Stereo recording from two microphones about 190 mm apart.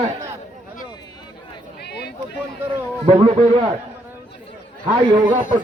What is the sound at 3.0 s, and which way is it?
Speech, 30° right (ahead or behind).